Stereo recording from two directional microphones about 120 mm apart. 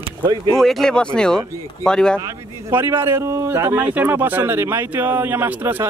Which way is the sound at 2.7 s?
20° right (ahead or behind).